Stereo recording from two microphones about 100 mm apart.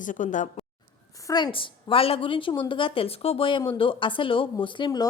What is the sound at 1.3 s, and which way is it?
A woman's voice, 55° left (ahead or behind).